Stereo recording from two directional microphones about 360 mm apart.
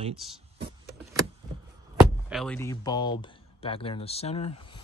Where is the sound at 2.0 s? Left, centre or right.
Centre.